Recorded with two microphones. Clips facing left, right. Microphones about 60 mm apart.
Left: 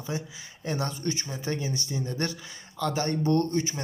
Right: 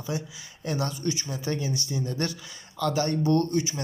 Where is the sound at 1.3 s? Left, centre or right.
Left.